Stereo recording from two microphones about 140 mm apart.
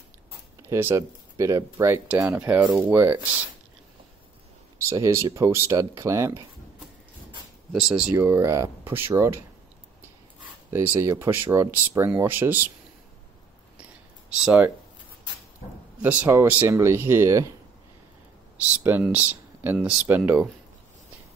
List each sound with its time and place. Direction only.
0.6 s speech: 15° right (ahead or behind)
4.7 s speech: 20° right (ahead or behind)
7.7 s speech: 5° right (ahead or behind)
8.3 s speech: 20° right (ahead or behind)
10.7 s speech: 20° right (ahead or behind)
14.4 s speech: 5° right (ahead or behind)
16.0 s speech: 15° right (ahead or behind)
18.9 s speech: 10° right (ahead or behind)